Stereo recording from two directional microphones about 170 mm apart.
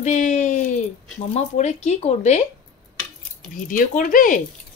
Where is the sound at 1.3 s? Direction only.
40° left (ahead or behind).